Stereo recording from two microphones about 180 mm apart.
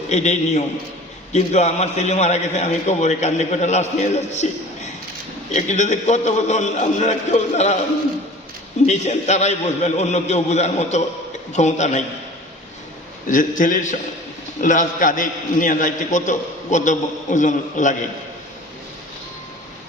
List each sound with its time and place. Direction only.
0.1 s a man's voice: 40° left (ahead or behind)
5.5 s a man's voice: 40° left (ahead or behind)
8.9 s a man's voice: 40° left (ahead or behind)
13.2 s a man's voice: 50° left (ahead or behind)